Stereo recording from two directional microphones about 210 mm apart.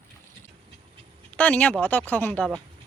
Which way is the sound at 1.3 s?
5° left (ahead or behind).